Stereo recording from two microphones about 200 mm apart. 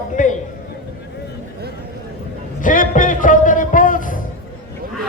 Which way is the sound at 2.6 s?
40° left (ahead or behind).